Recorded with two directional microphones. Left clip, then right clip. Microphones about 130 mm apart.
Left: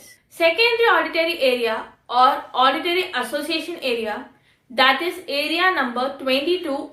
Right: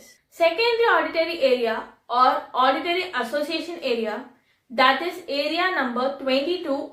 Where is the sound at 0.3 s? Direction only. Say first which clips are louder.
Left 3 dB; 25° left (ahead or behind).